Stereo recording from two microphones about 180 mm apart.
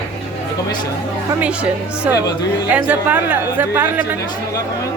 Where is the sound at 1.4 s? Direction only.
5° right (ahead or behind).